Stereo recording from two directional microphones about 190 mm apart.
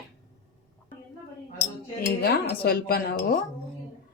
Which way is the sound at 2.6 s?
55° left (ahead or behind).